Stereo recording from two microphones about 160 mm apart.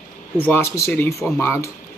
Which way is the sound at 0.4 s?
15° left (ahead or behind).